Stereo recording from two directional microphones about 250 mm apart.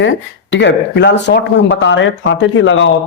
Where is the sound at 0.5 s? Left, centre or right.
Left.